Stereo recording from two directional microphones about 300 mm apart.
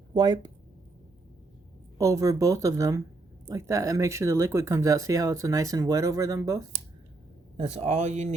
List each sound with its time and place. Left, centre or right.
0.1 s speech: centre
2.0 s speech: centre
7.8 s speech: right